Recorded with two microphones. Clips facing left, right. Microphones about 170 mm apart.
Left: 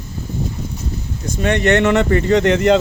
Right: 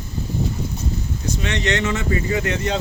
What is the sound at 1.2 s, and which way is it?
Speech, 50° left (ahead or behind).